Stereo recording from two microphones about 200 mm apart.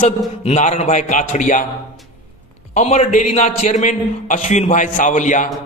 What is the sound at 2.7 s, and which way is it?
A man's voice, 35° left (ahead or behind).